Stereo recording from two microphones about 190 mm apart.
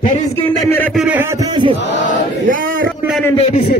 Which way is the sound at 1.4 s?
20° right (ahead or behind).